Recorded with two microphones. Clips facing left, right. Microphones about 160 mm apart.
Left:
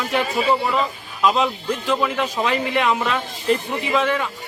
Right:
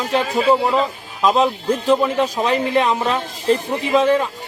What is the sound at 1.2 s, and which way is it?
A man's voice, 35° right (ahead or behind).